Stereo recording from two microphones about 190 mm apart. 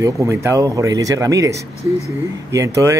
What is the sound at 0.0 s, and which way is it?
Speech, 15° right (ahead or behind).